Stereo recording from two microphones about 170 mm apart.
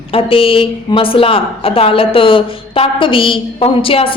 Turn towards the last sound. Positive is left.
turn(degrees=30)  # may be behind; listen again after turning